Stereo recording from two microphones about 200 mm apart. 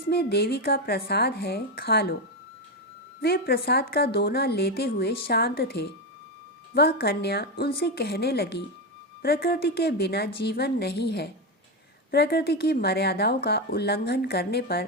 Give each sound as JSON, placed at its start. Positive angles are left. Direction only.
{"t": 0.1, "sound": "a woman's voice", "side_deg": 55}
{"t": 3.2, "sound": "a woman's voice", "side_deg": 50}